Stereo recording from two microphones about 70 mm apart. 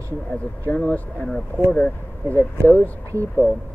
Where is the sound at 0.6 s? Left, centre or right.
Centre.